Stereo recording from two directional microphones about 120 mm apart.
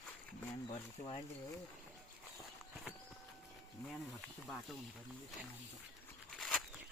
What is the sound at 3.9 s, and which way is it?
Speech, centre (ahead or behind).